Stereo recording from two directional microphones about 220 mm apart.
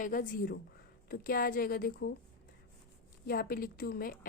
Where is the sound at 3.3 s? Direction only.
40° left (ahead or behind).